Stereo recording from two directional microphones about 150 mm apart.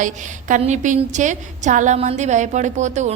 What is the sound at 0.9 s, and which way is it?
A woman's voice, 55° right (ahead or behind).